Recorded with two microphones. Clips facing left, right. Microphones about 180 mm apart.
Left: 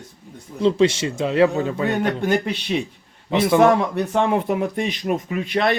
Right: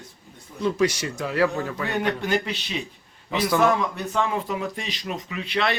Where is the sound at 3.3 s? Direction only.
25° left (ahead or behind).